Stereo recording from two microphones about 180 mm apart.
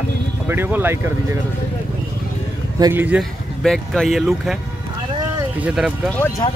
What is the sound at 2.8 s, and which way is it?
Speech, 10° right (ahead or behind).